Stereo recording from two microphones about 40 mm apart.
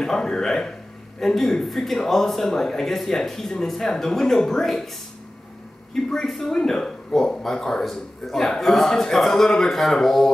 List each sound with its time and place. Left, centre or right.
0.0 s a man's voice: centre
6.0 s a man's voice: centre